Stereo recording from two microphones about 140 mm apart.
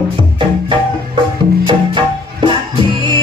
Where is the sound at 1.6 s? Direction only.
35° right (ahead or behind).